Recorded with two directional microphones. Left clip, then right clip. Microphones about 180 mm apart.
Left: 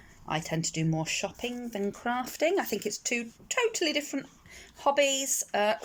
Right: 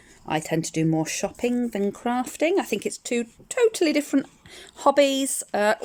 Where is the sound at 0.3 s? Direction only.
20° right (ahead or behind).